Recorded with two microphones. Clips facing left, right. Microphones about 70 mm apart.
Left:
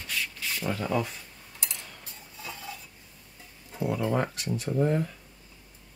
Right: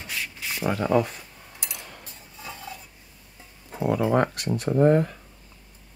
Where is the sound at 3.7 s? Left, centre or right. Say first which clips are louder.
Right 5 dB; right.